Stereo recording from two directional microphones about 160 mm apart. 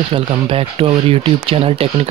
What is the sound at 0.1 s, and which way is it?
Speech, 35° right (ahead or behind).